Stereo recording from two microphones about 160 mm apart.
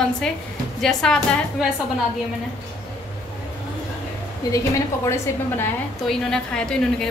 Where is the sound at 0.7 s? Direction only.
5° left (ahead or behind).